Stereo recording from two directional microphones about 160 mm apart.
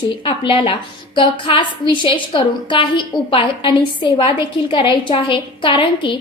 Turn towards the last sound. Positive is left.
turn(degrees=30)  # may be behind; listen again after turning